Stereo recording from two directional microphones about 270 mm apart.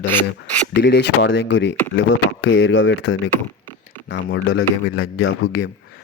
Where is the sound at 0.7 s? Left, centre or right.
Left.